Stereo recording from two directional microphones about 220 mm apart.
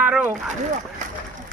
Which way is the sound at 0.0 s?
5° right (ahead or behind).